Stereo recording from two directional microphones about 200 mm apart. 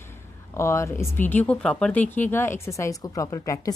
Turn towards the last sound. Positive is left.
turn(degrees=15)  # may be behind; listen again after turning